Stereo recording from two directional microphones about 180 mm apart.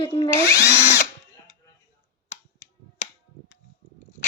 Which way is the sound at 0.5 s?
70° left (ahead or behind).